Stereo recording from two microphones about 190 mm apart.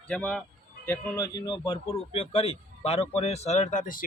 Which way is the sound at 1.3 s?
20° left (ahead or behind).